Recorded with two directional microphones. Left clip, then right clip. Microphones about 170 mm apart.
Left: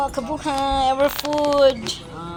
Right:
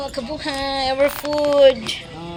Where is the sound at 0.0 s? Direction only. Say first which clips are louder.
Left 2 dB; 15° left (ahead or behind).